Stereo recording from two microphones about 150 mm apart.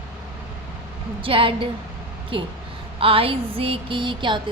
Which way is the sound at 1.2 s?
35° right (ahead or behind).